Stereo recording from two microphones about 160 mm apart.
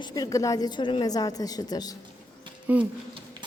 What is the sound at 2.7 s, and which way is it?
Speech, 10° right (ahead or behind).